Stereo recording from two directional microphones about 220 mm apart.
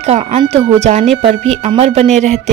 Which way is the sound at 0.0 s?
30° right (ahead or behind).